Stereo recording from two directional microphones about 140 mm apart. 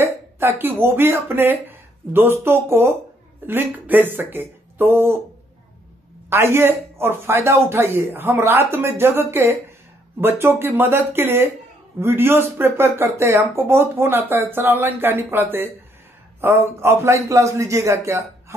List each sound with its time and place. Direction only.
0.0 s speech: 15° right (ahead or behind)
6.3 s speech: 15° right (ahead or behind)